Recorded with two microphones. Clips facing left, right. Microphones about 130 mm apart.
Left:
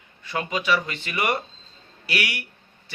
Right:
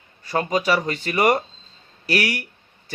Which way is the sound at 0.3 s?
40° right (ahead or behind).